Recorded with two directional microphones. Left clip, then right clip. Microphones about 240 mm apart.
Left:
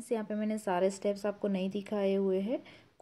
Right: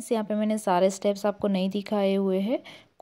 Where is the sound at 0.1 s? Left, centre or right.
Right.